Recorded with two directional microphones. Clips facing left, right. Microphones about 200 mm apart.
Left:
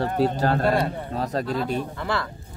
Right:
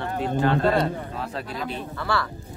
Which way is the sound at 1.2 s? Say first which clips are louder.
Left 6 dB; 40° left (ahead or behind).